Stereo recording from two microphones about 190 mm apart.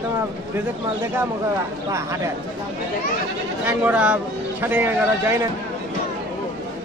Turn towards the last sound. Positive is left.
turn(degrees=-10)  # may be behind; listen again after turning